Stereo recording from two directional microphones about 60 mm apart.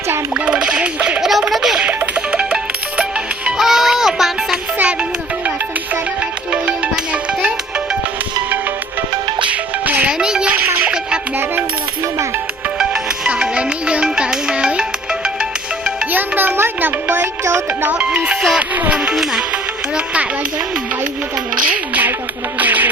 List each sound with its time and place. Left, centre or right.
0.3 s a sound: right
1.2 s a sound: centre
1.9 s music: right
3.6 s music: centre
4.8 s music: right
6.5 s music: right
9.5 s music: right
10.1 s music: centre
12.8 s music: centre
16.1 s music: right
18.7 s music: right
19.1 s music: centre
21.7 s music: right